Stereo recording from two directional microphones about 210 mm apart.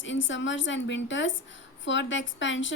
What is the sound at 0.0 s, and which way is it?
A woman's voice, 60° left (ahead or behind).